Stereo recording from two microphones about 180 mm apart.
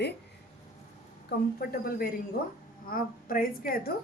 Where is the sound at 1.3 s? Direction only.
55° left (ahead or behind).